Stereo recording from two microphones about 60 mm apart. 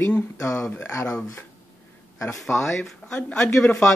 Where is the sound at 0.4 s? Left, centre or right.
Left.